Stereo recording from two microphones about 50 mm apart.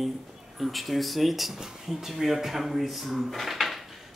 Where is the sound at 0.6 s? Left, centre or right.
Centre.